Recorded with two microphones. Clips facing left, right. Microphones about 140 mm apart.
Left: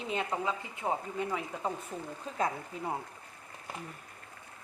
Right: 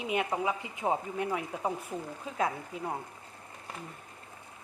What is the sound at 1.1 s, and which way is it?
Speech, 10° right (ahead or behind).